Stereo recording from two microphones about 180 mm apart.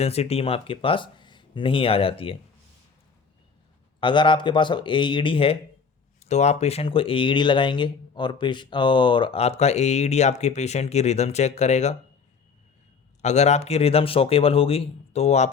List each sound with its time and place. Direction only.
0.0 s speech: 35° left (ahead or behind)
4.0 s speech: 25° left (ahead or behind)
13.2 s speech: 40° left (ahead or behind)